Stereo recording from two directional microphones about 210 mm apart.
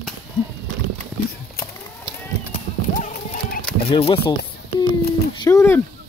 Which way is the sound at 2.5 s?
35° left (ahead or behind).